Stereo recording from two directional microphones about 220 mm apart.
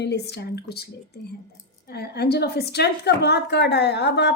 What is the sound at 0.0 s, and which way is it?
A woman's voice, 50° left (ahead or behind).